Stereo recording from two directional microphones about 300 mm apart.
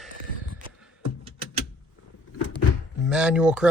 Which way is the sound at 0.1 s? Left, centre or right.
Right.